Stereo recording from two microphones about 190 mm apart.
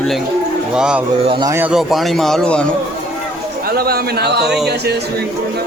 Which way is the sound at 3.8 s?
55° right (ahead or behind).